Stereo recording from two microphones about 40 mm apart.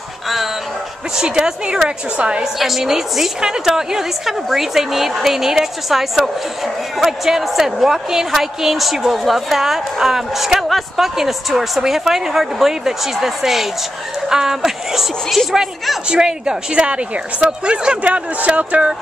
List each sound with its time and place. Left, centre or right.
1.1 s a woman's voice: centre
2.4 s a woman's voice: centre; by 18.9 s right